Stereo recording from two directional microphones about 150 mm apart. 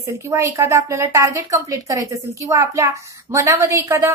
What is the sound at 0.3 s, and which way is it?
A woman's voice, 20° right (ahead or behind).